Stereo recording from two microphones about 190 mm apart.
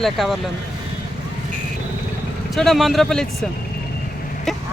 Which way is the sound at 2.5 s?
Centre (ahead or behind).